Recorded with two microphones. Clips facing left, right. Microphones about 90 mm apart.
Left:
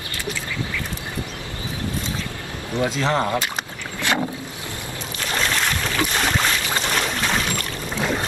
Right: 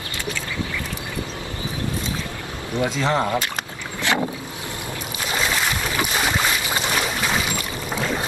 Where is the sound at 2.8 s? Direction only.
Centre (ahead or behind).